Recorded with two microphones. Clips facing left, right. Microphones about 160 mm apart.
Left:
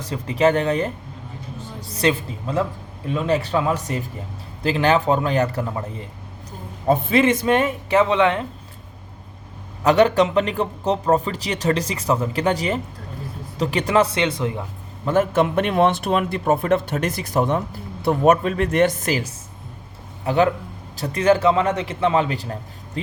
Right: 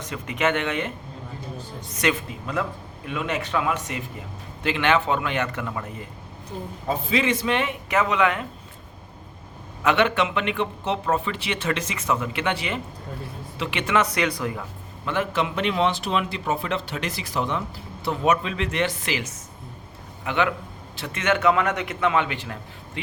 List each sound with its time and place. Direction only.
0.0 s speech: 35° left (ahead or behind)
6.8 s a man's voice: 55° left (ahead or behind); by 8.4 s 30° left (ahead or behind)
9.8 s speech: 40° left (ahead or behind)
15.0 s a man's voice: 45° left (ahead or behind)